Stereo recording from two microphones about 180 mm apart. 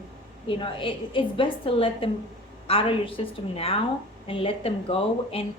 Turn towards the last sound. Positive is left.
turn(degrees=30)  # may be behind; listen again after turning